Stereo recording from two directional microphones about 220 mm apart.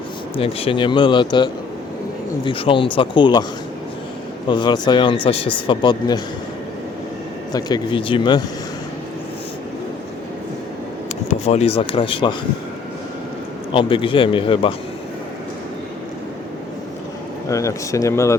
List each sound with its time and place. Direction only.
0.3 s speech: 25° left (ahead or behind)
4.4 s speech: 20° left (ahead or behind)
7.5 s speech: 20° left (ahead or behind)
11.3 s speech: 30° left (ahead or behind)
13.7 s speech: 25° left (ahead or behind)
17.5 s speech: 15° left (ahead or behind)